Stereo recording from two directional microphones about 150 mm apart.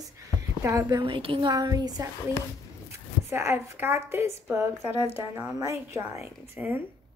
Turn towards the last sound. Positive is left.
turn(degrees=-15)  # may be behind; listen again after turning